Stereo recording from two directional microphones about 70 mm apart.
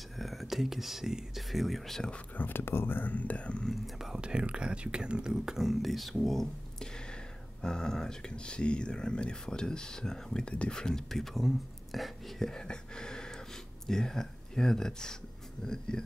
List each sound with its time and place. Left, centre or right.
0.2 s speech: centre
2.3 s speech: left
3.7 s speech: centre